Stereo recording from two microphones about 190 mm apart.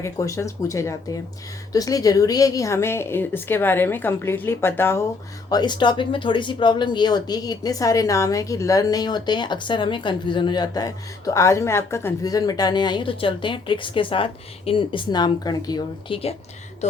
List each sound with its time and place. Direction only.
0.0 s a woman's voice: 15° left (ahead or behind)